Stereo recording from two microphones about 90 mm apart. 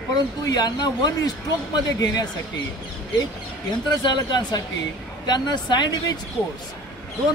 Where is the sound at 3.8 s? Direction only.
55° left (ahead or behind).